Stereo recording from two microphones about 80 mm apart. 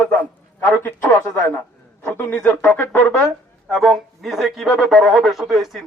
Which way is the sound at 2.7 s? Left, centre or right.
Left.